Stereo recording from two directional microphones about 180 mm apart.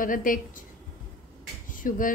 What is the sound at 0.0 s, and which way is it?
Speech, 50° left (ahead or behind).